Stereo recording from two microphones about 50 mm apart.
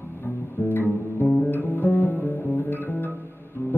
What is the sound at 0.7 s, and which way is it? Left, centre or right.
Music, left.